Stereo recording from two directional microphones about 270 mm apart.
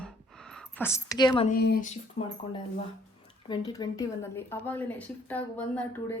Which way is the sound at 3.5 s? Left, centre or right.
Centre.